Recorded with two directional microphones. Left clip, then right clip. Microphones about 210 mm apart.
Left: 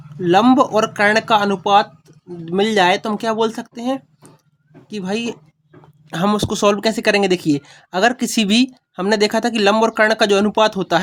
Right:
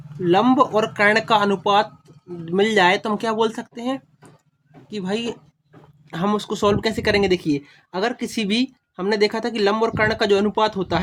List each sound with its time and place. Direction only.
0.2 s speech: 25° left (ahead or behind)